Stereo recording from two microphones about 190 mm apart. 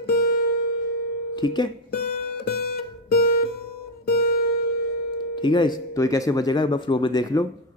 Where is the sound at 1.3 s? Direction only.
25° left (ahead or behind).